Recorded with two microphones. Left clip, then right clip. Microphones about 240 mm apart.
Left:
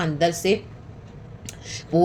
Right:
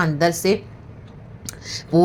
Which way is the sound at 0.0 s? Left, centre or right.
Right.